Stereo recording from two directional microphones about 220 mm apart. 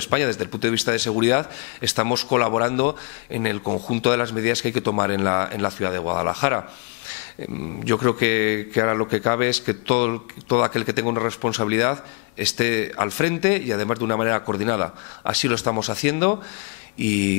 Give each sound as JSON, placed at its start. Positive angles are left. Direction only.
{"t": 0.1, "sound": "speech", "side_deg": 15}
{"t": 4.0, "sound": "speech", "side_deg": 15}
{"t": 7.9, "sound": "speech", "side_deg": 15}
{"t": 16.1, "sound": "speech", "side_deg": 15}